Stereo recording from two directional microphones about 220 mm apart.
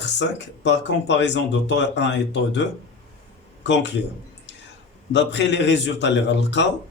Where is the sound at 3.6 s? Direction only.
50° left (ahead or behind).